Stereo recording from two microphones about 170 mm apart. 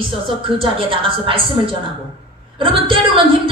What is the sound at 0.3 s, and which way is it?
A woman's voice, 30° right (ahead or behind).